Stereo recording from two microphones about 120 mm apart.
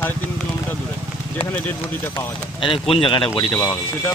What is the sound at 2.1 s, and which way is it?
Speech, 45° left (ahead or behind).